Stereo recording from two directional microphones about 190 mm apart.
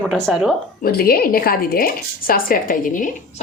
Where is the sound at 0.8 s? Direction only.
55° left (ahead or behind).